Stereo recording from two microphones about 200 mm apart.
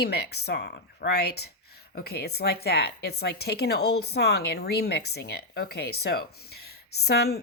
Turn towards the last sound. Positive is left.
turn(degrees=55)  # may be behind; listen again after turning